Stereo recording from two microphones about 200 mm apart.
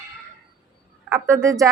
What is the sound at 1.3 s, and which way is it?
Speech, 15° right (ahead or behind).